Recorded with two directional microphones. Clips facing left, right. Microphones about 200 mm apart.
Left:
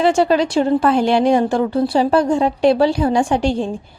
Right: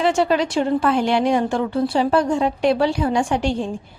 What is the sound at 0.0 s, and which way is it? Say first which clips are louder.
A woman's voice: left 4 dB; 35° left (ahead or behind).